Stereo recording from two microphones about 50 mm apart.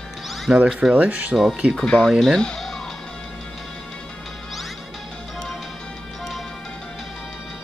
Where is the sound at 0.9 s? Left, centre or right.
Right.